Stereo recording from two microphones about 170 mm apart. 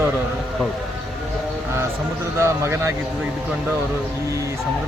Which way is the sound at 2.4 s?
15° right (ahead or behind).